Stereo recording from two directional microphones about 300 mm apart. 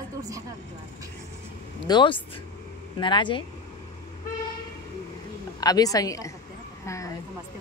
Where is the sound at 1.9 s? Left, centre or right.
Centre.